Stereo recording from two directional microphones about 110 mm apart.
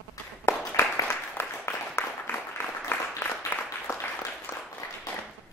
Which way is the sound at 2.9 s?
20° left (ahead or behind).